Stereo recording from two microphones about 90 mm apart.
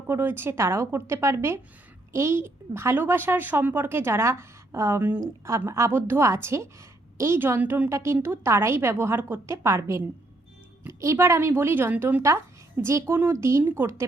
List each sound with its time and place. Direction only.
0.1 s a woman's voice: 25° right (ahead or behind)